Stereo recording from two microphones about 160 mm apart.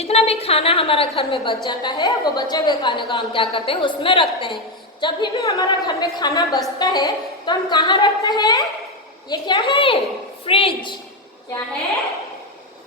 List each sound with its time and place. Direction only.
0.0 s a woman's voice: 40° left (ahead or behind)